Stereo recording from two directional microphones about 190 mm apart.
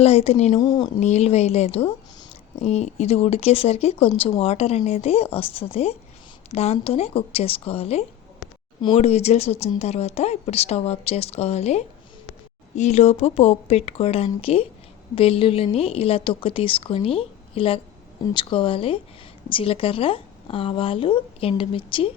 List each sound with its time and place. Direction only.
0.0 s speech: 30° left (ahead or behind)
0.6 s a woman's voice: 20° left (ahead or behind)
0.9 s a woman's voice: 35° left (ahead or behind)